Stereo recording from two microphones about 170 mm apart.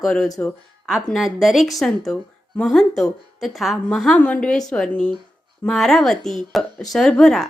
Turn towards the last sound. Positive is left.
turn(degrees=5)  # may be behind; listen again after turning